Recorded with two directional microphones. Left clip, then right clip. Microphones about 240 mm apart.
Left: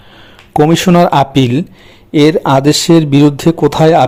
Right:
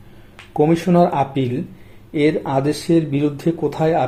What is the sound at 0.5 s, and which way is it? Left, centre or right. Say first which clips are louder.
Speech: left 7 dB; left.